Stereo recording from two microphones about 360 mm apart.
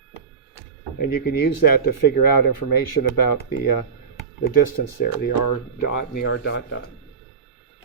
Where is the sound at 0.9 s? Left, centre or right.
Left.